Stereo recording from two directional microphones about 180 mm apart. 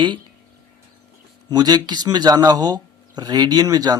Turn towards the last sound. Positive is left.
turn(degrees=-20)  # may be behind; listen again after turning